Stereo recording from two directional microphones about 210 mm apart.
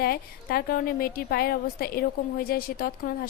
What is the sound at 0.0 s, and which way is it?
A woman's voice, 45° left (ahead or behind).